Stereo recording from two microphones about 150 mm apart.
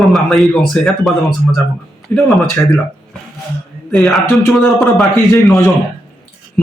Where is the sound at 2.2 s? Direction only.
Centre (ahead or behind).